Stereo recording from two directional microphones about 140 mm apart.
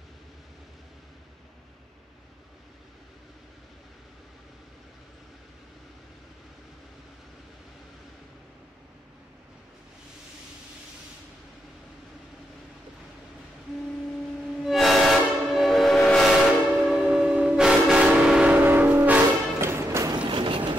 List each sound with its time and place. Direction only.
14.6 s train: centre (ahead or behind); by 20.2 s 20° right (ahead or behind)
20.2 s train: 35° right (ahead or behind)